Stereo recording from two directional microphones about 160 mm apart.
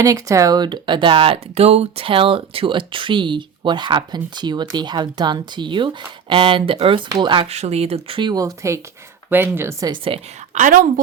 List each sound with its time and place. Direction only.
0.0 s speech: 20° right (ahead or behind)
9.9 s speech: 35° right (ahead or behind)
10.5 s a woman's voice: 55° right (ahead or behind)